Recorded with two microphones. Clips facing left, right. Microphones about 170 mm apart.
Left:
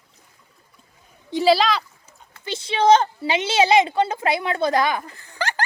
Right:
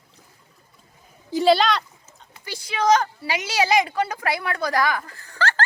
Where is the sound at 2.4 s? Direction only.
25° left (ahead or behind).